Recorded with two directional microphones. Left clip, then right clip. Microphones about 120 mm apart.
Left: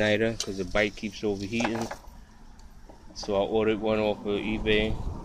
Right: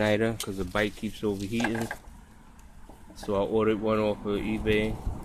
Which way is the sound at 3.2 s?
55° right (ahead or behind).